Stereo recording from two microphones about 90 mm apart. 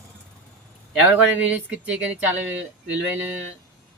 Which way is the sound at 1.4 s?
15° right (ahead or behind).